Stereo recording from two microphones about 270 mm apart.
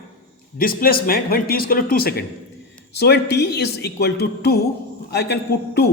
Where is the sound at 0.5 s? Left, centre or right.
Left.